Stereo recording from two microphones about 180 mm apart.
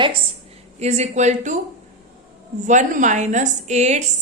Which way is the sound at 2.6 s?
45° right (ahead or behind).